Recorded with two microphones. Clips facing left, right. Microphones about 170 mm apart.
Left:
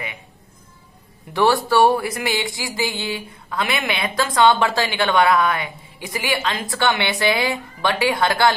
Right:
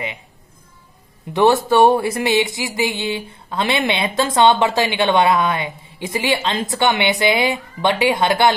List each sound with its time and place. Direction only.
1.3 s speech: 20° right (ahead or behind)